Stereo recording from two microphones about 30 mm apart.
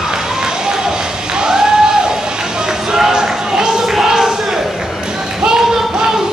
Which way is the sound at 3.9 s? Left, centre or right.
Centre.